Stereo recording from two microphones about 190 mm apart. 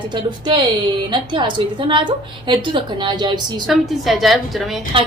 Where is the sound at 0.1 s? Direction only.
25° right (ahead or behind).